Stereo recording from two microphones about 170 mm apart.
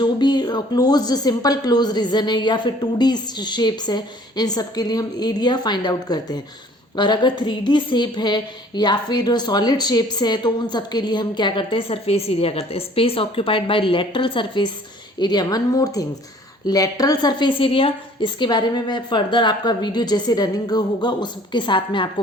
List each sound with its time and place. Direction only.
0.0 s a woman's voice: 25° left (ahead or behind)